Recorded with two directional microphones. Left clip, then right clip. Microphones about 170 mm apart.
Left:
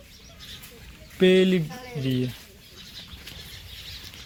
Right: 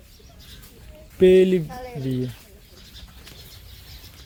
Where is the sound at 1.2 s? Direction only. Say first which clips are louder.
Right 4 dB; 35° right (ahead or behind).